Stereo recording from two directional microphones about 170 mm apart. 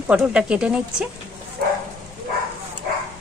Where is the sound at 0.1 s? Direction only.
5° right (ahead or behind).